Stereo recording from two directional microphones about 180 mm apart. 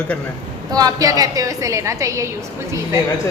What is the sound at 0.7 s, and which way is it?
A woman's voice, 20° right (ahead or behind).